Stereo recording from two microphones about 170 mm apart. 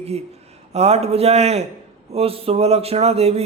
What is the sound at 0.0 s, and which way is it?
Speech, 40° right (ahead or behind).